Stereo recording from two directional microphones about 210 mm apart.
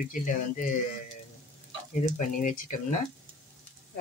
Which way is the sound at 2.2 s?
35° left (ahead or behind).